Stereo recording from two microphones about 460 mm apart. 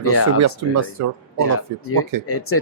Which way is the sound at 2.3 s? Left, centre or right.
Left.